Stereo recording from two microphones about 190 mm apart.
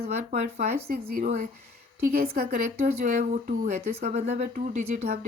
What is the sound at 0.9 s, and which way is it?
Speech, 50° right (ahead or behind).